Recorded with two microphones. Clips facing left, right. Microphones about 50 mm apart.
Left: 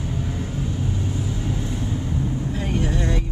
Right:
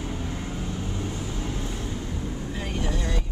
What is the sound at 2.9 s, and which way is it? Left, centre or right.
Vehicle, left.